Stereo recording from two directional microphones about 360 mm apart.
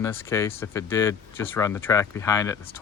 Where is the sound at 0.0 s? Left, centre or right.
Centre.